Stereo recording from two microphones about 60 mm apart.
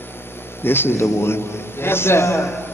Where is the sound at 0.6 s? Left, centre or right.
Left.